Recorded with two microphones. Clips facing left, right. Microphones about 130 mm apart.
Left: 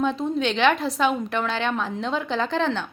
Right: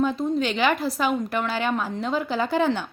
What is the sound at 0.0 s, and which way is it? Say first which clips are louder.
A woman's voice: even; 5° right (ahead or behind).